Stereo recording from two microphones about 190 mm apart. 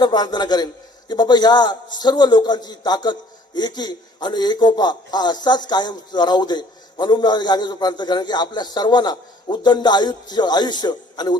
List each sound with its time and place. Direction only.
0.0 s a man's voice: 20° left (ahead or behind)